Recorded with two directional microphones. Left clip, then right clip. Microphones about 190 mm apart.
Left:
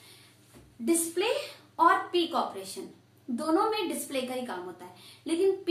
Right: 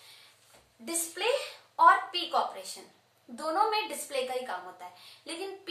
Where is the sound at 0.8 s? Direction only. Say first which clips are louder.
Left 5 dB; 15° right (ahead or behind).